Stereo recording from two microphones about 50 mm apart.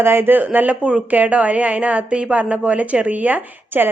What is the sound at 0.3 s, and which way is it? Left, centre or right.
A woman's voice, right.